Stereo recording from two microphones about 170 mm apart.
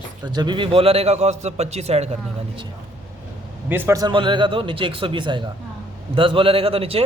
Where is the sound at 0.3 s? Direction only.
25° right (ahead or behind).